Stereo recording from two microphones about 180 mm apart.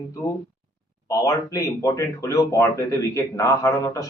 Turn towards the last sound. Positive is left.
turn(degrees=15)  # may be behind; listen again after turning